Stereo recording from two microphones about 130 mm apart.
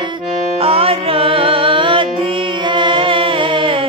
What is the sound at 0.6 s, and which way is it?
Music, 45° right (ahead or behind).